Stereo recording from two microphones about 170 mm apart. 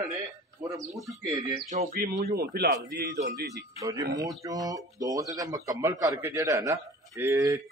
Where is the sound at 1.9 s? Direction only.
60° right (ahead or behind).